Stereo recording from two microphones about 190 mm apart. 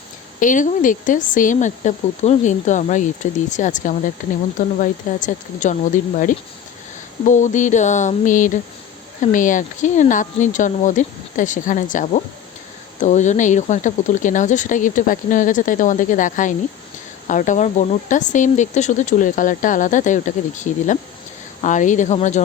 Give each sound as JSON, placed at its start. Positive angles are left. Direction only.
{"t": 0.3, "sound": "speech", "side_deg": 40}